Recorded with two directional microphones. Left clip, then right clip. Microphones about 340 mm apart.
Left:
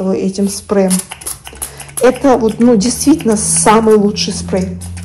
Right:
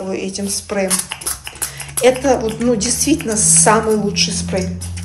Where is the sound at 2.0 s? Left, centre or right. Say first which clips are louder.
Left 3 dB; left.